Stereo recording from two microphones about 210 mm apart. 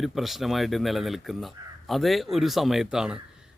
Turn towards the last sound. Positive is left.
turn(degrees=-5)  # may be behind; listen again after turning